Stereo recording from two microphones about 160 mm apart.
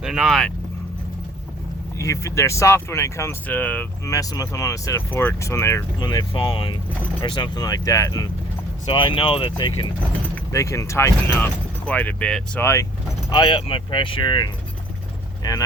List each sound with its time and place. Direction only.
0.0 s speech: 5° right (ahead or behind)
2.0 s speech: 20° left (ahead or behind)
8.9 s speech: 30° left (ahead or behind)
10.5 s speech: 20° left (ahead or behind)
13.3 s speech: 30° left (ahead or behind)